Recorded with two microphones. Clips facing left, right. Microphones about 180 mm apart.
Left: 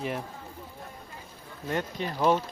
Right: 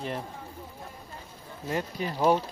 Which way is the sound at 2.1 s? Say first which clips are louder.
Right 1 dB; 15° right (ahead or behind).